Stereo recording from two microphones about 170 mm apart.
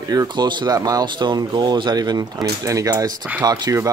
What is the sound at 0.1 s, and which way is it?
Speech, 25° right (ahead or behind).